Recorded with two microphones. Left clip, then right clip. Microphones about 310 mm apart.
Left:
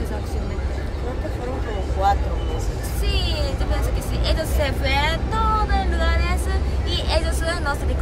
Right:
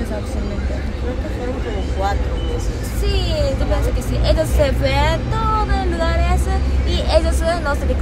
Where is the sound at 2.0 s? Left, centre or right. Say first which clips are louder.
Left 4 dB; centre.